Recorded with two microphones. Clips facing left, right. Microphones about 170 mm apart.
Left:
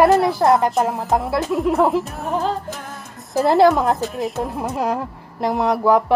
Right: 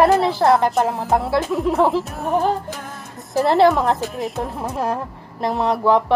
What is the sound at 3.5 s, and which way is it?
Speech, 15° left (ahead or behind).